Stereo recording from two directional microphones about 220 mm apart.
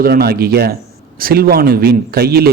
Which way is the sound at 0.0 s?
45° right (ahead or behind).